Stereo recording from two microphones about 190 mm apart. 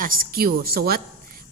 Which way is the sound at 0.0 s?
50° right (ahead or behind).